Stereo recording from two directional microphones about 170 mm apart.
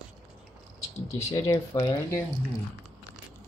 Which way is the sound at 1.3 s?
25° left (ahead or behind).